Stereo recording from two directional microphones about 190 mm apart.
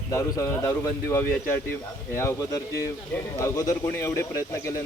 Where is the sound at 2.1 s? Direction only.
15° left (ahead or behind).